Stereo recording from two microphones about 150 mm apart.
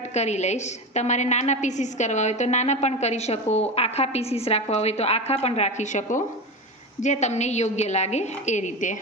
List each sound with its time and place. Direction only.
0.1 s a woman's voice: 50° left (ahead or behind)